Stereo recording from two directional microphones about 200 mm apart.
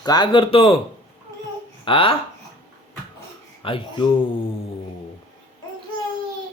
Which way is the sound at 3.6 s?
25° left (ahead or behind).